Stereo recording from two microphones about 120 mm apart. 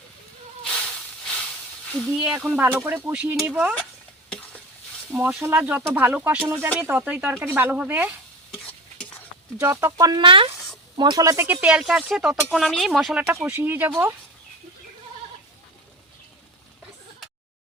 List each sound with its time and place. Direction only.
1.2 s hiss: 10° left (ahead or behind)
1.9 s speech: 10° left (ahead or behind)
2.1 s speech: 5° right (ahead or behind)
2.6 s speech: 15° right (ahead or behind)
4.3 s stir: 10° left (ahead or behind)
5.4 s speech: 15° right (ahead or behind)
9.6 s speech: 20° right (ahead or behind)
10.2 s speech: 45° right (ahead or behind); by 11.4 s 30° right (ahead or behind)
11.6 s speech: 5° right (ahead or behind)
13.3 s speech: 20° right (ahead or behind)